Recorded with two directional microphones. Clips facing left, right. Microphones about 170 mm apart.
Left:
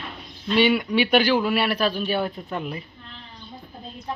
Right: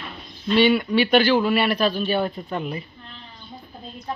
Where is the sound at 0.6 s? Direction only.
10° left (ahead or behind).